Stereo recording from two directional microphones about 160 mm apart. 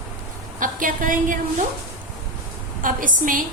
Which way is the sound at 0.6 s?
55° right (ahead or behind).